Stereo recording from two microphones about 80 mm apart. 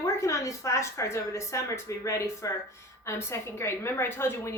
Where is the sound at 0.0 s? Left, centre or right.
Left.